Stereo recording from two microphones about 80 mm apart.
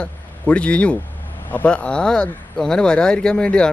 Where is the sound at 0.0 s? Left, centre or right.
Centre.